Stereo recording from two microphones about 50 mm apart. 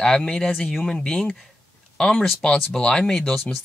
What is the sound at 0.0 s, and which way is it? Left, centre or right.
Speech, centre.